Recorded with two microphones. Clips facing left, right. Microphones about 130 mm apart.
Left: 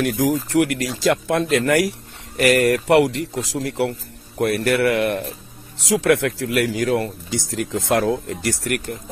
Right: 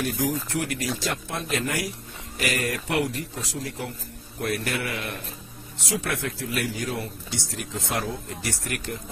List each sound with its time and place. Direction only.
0.0 s speech: 90° left
4.4 s a man's voice: 70° left (ahead or behind)
5.9 s a man's voice: 90° left